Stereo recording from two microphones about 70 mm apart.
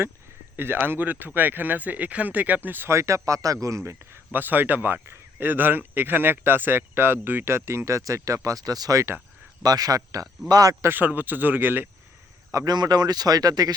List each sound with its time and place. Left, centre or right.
0.5 s speech: right
2.9 s speech: right
4.3 s speech: right
9.6 s speech: right
10.8 s speech: right
12.6 s speech: right